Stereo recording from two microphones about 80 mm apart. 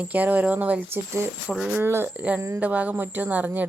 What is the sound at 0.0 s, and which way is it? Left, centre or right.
Speech, right.